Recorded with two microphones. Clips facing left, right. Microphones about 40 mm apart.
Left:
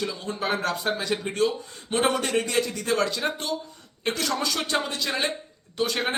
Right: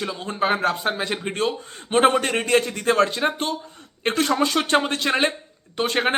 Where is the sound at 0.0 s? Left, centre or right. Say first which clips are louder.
Right 5 dB; right.